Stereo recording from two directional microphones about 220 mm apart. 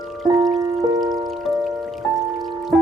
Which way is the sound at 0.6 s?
20° right (ahead or behind).